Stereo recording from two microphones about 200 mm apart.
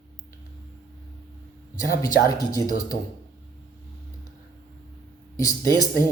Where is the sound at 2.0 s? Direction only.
20° left (ahead or behind).